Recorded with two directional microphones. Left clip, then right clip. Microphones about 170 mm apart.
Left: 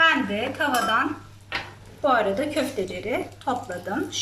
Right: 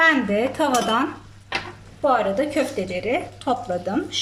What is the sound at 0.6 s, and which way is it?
Speech, 25° right (ahead or behind).